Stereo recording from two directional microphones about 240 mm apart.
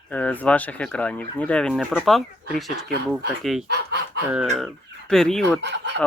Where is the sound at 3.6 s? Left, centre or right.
Right.